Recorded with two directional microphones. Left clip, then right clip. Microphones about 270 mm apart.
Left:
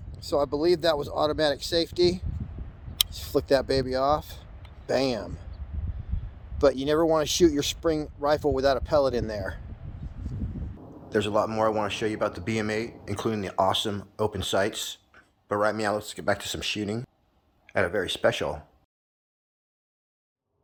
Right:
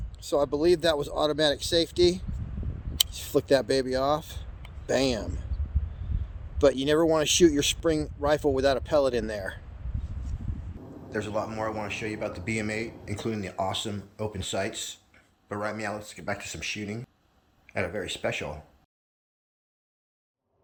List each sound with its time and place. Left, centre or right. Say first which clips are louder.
0.2 s speech: even; centre
6.8 s speech: even; centre
11.1 s speech: left 6 dB; left